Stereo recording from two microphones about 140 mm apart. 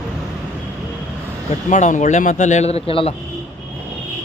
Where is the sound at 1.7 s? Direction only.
60° left (ahead or behind); by 3.1 s 45° left (ahead or behind).